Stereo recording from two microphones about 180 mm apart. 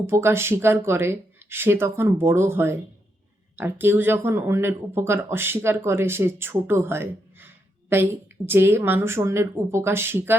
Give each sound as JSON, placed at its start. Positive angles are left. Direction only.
{"t": 0.0, "sound": "speech", "side_deg": -15}